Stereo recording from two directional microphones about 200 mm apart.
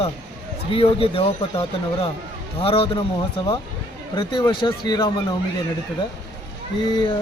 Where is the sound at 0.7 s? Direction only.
30° left (ahead or behind).